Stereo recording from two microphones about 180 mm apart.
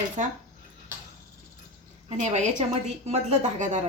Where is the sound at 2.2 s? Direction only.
40° right (ahead or behind).